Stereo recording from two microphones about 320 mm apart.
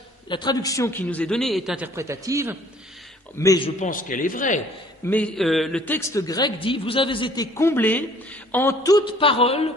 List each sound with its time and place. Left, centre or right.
0.3 s a man's voice: centre
3.3 s a man's voice: centre
5.0 s a man's voice: centre